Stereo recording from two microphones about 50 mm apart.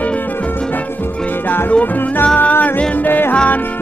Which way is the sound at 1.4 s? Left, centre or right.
Left.